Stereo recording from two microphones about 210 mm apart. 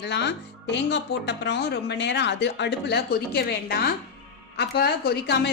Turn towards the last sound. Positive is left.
turn(degrees=50)  # may be behind; listen again after turning